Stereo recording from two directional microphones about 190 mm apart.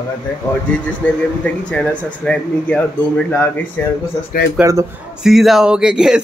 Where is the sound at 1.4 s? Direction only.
5° left (ahead or behind).